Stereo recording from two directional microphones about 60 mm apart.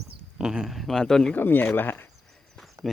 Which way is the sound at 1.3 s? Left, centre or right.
Left.